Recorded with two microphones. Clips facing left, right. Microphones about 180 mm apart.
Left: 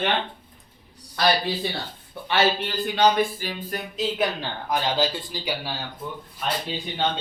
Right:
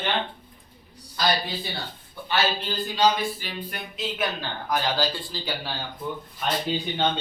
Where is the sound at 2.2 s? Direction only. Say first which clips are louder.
Left 3 dB; 70° left (ahead or behind); by 4.0 s 45° left (ahead or behind).